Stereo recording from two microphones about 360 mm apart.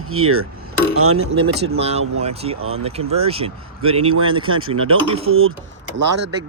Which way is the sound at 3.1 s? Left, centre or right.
Centre.